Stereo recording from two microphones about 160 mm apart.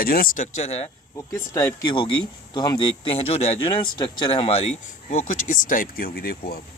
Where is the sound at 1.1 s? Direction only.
20° left (ahead or behind); by 6.6 s 70° left (ahead or behind).